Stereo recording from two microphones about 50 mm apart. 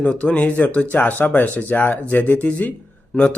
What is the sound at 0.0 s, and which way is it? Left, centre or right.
Speech, left.